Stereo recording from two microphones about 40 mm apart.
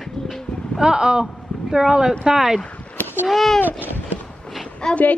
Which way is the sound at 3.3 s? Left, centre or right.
Centre.